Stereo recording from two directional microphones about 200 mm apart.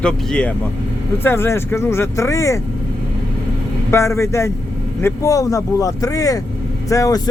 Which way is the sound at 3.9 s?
15° left (ahead or behind).